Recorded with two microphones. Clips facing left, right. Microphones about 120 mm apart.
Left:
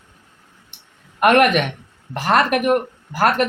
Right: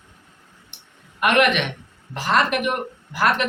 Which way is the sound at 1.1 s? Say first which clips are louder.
Left 4 dB; 45° left (ahead or behind).